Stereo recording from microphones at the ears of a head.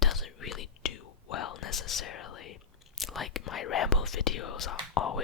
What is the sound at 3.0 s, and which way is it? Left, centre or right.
Speech, left.